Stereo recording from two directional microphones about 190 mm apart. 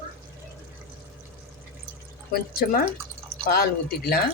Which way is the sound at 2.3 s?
50° left (ahead or behind).